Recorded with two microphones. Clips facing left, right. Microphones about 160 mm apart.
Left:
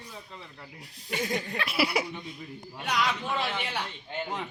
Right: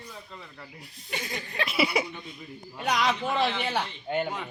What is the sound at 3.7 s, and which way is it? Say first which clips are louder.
Speech: right 6 dB; 55° right (ahead or behind).